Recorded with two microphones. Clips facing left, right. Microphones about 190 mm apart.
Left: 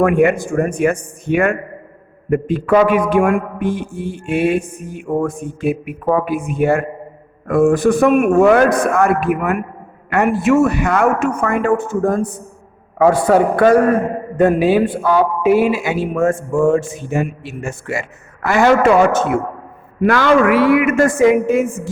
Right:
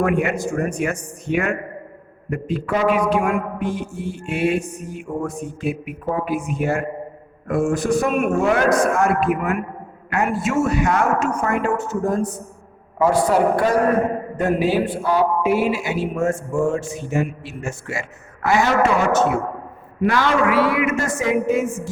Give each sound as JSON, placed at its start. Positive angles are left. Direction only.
{"t": 0.0, "sound": "a man's voice", "side_deg": 55}
{"t": 13.2, "sound": "a man's voice", "side_deg": 75}